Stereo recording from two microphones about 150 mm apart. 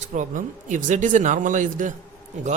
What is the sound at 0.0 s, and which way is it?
Speech, 60° right (ahead or behind).